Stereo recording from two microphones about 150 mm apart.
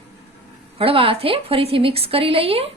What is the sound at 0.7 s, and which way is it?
A woman's voice, 40° right (ahead or behind).